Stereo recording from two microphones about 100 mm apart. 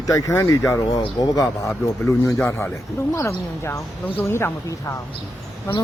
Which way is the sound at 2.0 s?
30° left (ahead or behind).